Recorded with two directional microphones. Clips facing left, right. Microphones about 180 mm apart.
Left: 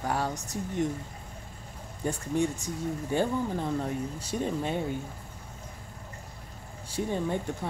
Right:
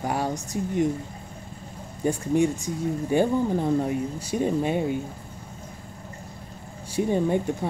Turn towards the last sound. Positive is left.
turn(degrees=-15)  # may be behind; listen again after turning